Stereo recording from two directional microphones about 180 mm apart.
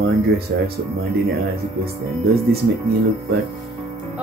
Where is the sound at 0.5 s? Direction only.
70° right (ahead or behind).